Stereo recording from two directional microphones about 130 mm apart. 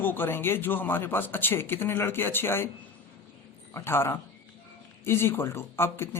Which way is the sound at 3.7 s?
20° left (ahead or behind).